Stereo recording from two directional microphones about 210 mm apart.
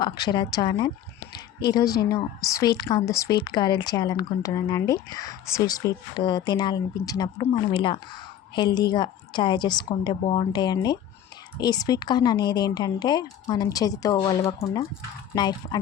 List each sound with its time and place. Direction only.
0.0 s a woman's voice: 20° left (ahead or behind)